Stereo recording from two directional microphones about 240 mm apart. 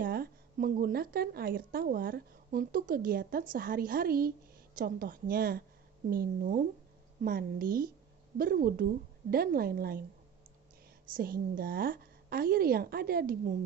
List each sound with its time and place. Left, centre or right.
0.0 s speech: right
11.1 s speech: right